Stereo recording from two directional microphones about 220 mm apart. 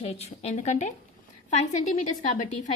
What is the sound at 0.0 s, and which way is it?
Speech, 30° left (ahead or behind).